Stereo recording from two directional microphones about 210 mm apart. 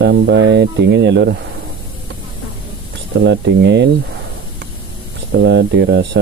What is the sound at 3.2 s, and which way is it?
Speech, 55° right (ahead or behind).